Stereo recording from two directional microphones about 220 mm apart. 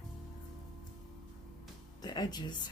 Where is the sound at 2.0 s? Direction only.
20° left (ahead or behind).